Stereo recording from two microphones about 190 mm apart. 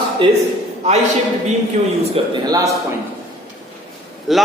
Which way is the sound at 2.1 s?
20° right (ahead or behind).